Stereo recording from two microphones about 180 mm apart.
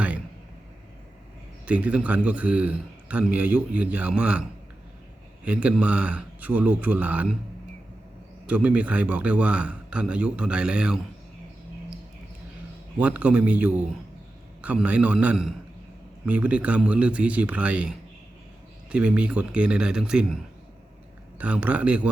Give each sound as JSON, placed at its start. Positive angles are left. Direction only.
{"t": 1.6, "sound": "a man's voice", "side_deg": -5}
{"t": 5.5, "sound": "a man's voice", "side_deg": -5}
{"t": 8.4, "sound": "a man's voice", "side_deg": -5}
{"t": 13.0, "sound": "a man's voice", "side_deg": -10}